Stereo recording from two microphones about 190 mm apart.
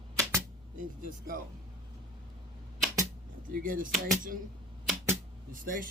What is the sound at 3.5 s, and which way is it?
Speech, 45° right (ahead or behind).